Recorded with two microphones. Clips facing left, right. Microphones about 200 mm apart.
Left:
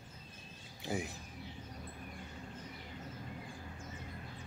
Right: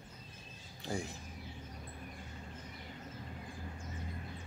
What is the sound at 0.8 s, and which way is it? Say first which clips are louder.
Speech: left 1 dB; 5° left (ahead or behind).